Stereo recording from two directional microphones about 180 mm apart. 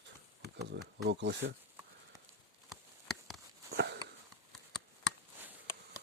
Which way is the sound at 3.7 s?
70° right (ahead or behind).